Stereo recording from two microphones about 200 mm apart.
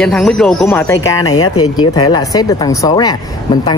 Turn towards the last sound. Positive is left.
turn(degrees=20)  # may be behind; listen again after turning